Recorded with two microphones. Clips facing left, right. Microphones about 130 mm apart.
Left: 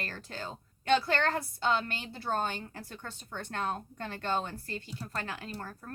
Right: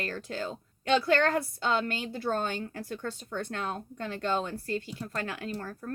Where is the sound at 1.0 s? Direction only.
45° right (ahead or behind).